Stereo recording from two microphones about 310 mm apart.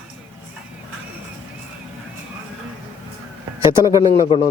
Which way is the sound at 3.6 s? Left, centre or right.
Centre.